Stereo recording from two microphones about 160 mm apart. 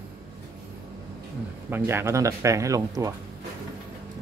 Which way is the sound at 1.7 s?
15° right (ahead or behind).